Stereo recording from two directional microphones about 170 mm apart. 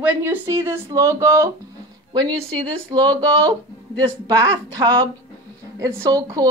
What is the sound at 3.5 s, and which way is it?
Speech, 25° right (ahead or behind).